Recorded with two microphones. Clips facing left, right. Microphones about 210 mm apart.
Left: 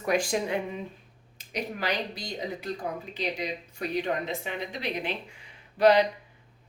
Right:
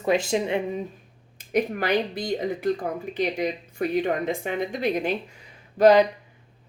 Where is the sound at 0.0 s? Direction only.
25° right (ahead or behind).